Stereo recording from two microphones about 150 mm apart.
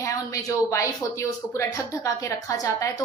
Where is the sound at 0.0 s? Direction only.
20° left (ahead or behind).